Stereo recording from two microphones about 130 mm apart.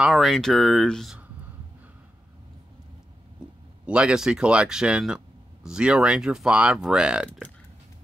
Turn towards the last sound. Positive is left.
turn(degrees=-5)  # may be behind; listen again after turning